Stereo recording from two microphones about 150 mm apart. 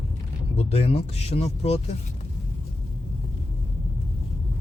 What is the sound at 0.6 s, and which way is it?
Speech, 45° left (ahead or behind).